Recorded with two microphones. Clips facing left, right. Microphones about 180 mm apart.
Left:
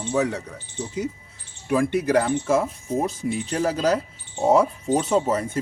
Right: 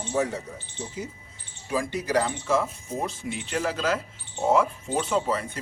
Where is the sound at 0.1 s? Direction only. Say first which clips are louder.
Left 3 dB; 70° left (ahead or behind).